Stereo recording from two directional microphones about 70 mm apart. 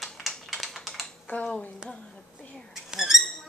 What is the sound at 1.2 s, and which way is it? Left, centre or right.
Speech, centre.